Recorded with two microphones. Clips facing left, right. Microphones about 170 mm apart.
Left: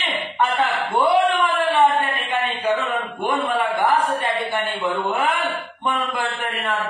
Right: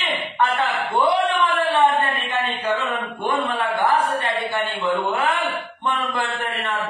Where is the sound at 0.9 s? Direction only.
10° left (ahead or behind).